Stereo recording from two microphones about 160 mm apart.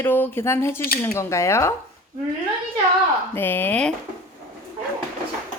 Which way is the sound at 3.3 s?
10° left (ahead or behind).